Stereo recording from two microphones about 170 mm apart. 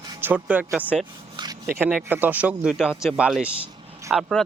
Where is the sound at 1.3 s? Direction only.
25° right (ahead or behind).